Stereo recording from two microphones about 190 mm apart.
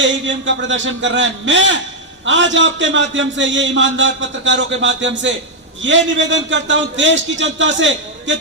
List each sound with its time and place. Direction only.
0.0 s a man's voice: 75° right (ahead or behind)